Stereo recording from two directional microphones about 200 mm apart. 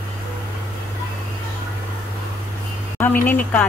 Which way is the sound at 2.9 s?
10° left (ahead or behind).